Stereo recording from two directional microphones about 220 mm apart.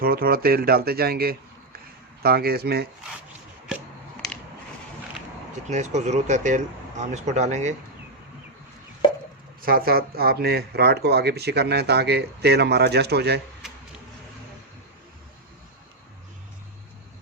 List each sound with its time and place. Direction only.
0.0 s speech: 45° right (ahead or behind)
5.6 s speech: 30° right (ahead or behind)
9.6 s speech: 40° right (ahead or behind)